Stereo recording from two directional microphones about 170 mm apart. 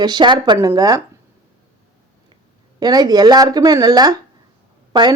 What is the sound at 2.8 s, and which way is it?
A woman's voice, 25° right (ahead or behind).